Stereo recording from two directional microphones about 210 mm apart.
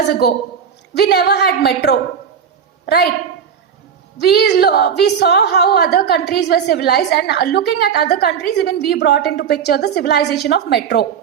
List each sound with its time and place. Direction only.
0.1 s a woman's voice: 50° left (ahead or behind)
4.2 s a woman's voice: 50° left (ahead or behind)